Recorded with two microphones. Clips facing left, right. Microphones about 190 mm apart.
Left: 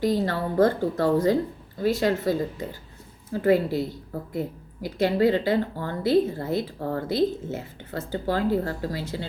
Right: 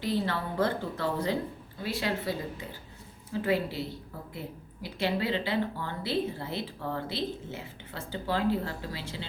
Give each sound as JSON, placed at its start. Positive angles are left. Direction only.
{"t": 0.0, "sound": "speech", "side_deg": 45}